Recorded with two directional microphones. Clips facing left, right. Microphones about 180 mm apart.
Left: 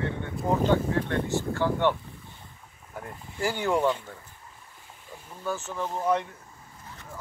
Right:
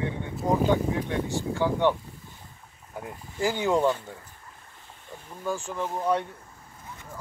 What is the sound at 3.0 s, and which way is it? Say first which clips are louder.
Speech: right 2 dB; 15° right (ahead or behind).